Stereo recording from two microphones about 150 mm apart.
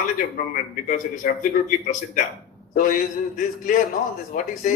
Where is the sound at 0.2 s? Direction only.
65° left (ahead or behind).